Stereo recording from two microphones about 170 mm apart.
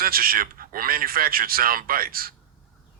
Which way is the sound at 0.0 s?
60° right (ahead or behind).